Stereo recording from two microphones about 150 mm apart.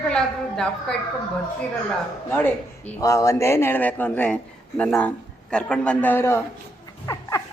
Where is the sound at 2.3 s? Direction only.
15° left (ahead or behind).